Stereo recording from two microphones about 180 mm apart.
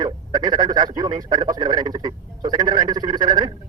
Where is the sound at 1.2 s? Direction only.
20° right (ahead or behind).